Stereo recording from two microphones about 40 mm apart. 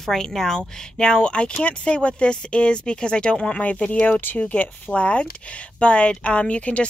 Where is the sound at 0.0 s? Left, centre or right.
Centre; by 4.2 s left.